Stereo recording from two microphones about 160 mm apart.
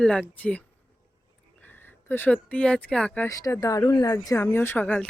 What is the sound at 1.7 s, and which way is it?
Speech, 10° left (ahead or behind).